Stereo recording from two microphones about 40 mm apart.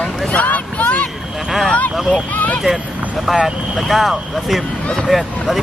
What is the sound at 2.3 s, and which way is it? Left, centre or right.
Speech, left.